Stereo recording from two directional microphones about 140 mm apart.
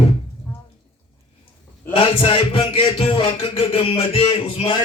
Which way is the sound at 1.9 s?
40° left (ahead or behind).